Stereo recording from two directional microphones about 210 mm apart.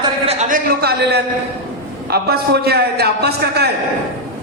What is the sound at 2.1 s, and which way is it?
A man's voice, 50° right (ahead or behind).